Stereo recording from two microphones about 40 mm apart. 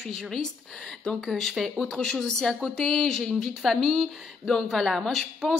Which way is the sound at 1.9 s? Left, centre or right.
Centre.